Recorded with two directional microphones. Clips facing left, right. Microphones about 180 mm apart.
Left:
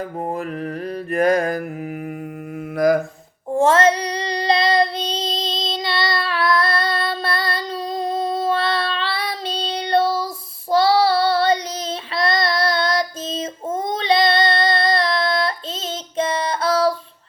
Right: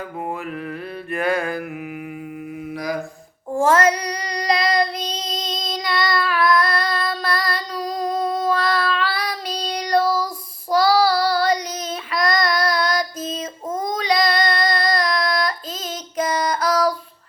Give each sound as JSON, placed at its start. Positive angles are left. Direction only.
{"t": 1.1, "sound": "mantra", "side_deg": 40}
{"t": 2.7, "sound": "mantra", "side_deg": 50}
{"t": 3.5, "sound": "child singing", "side_deg": 25}